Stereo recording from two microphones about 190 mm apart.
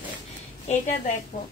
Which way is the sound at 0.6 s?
40° left (ahead or behind).